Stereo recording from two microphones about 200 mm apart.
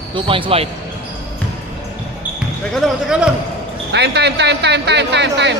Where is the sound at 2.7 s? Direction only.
Centre (ahead or behind).